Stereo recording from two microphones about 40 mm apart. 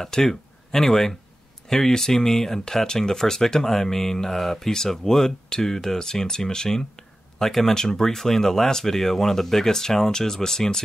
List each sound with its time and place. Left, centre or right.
0.0 s speech: centre